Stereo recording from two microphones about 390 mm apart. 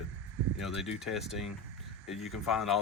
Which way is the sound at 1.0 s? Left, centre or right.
Centre.